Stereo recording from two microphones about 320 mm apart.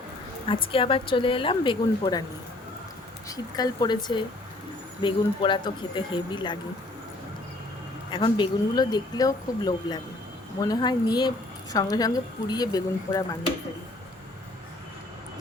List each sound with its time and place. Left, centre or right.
0.4 s a woman's voice: centre
3.2 s a woman's voice: centre
8.1 s a woman's voice: centre